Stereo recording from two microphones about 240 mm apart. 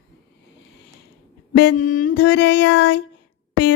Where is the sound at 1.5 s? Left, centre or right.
Left.